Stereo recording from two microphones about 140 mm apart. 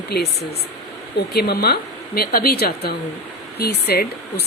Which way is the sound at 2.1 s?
90° left.